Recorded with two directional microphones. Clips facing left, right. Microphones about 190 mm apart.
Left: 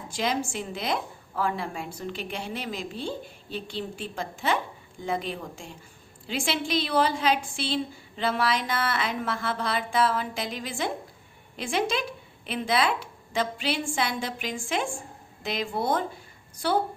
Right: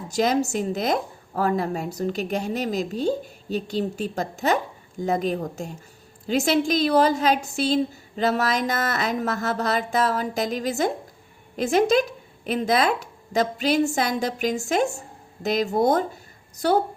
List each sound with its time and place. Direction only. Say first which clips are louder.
0.1 s a woman's voice: right 7 dB; 45° right (ahead or behind)